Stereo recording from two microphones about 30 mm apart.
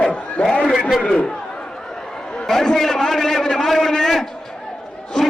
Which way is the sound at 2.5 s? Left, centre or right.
Centre.